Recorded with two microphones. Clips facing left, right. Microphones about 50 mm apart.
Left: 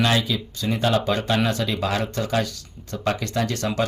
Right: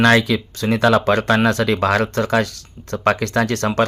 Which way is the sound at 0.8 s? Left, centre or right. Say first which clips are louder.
Right 7 dB; right.